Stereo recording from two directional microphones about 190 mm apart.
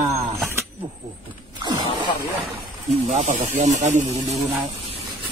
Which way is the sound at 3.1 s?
40° right (ahead or behind).